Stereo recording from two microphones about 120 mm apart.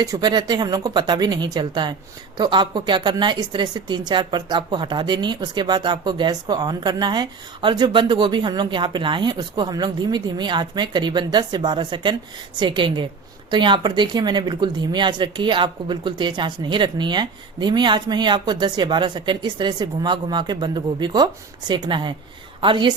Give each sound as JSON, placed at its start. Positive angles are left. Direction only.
{"t": 0.0, "sound": "a woman's voice", "side_deg": -30}